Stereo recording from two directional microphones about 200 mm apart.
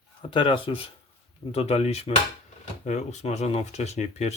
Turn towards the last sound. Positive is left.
turn(degrees=35)  # may be behind; listen again after turning